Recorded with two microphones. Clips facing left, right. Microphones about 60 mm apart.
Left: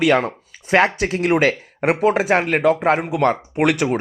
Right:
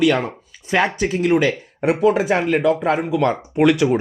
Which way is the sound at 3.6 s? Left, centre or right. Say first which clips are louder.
Right 3 dB; left.